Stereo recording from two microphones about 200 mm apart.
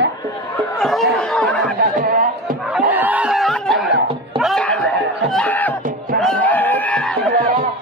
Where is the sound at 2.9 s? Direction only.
10° right (ahead or behind).